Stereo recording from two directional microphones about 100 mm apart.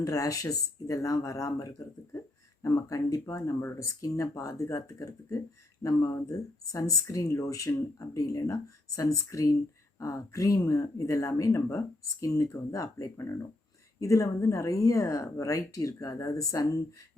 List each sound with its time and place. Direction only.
0.0 s speech: 35° left (ahead or behind)